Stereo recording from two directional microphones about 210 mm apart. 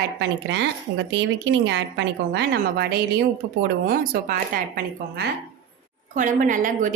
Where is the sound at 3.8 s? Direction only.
45° right (ahead or behind).